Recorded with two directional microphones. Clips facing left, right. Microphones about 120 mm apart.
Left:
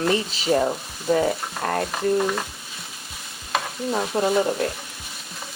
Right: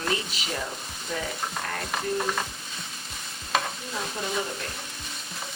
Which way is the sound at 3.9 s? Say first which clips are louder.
Left 11 dB; 65° left (ahead or behind).